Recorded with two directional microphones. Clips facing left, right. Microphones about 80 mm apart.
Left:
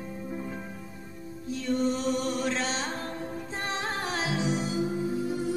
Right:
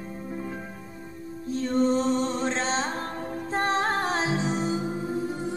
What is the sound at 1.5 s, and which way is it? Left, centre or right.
Music, right.